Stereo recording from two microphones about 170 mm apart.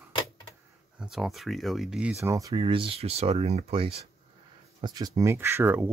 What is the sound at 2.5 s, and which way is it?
Speech, 30° right (ahead or behind).